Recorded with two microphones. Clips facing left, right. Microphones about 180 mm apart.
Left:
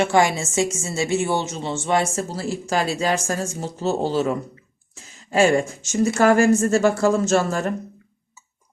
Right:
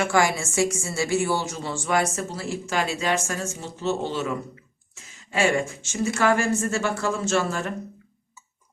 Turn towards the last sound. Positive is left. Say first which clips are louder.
# left 4 dB
turn(degrees=40)  # may be behind; listen again after turning